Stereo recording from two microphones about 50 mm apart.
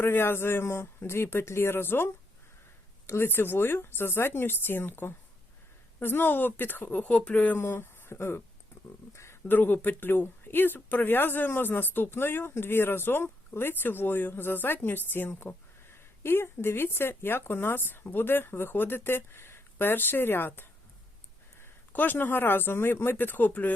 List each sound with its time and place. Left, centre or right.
0.0 s speech: left
3.1 s speech: left
7.6 s speech: left
9.1 s a sound: left
9.5 s speech: left
21.9 s speech: left